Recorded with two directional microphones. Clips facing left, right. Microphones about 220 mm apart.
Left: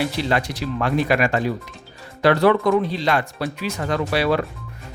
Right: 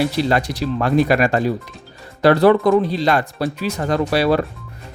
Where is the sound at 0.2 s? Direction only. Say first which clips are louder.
Right 4 dB; 40° right (ahead or behind).